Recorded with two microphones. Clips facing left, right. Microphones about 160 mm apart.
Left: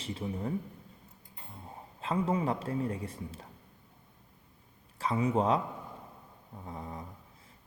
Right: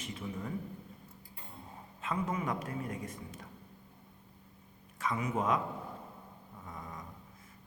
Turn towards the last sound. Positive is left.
turn(degrees=30)  # may be behind; listen again after turning